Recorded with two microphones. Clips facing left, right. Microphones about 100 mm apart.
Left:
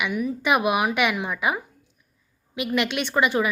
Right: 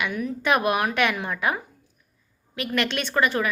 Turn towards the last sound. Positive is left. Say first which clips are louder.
# left 1 dB
turn(degrees=15)  # may be behind; listen again after turning